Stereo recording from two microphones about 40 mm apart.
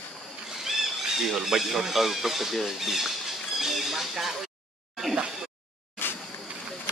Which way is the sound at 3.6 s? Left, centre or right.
Centre.